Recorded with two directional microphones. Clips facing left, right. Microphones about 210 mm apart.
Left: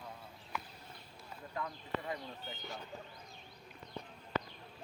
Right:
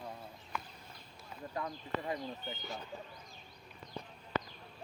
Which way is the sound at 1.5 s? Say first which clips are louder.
Right 1 dB; 25° right (ahead or behind).